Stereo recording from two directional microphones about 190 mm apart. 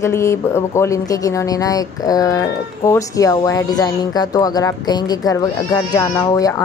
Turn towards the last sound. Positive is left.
turn(degrees=20)  # may be behind; listen again after turning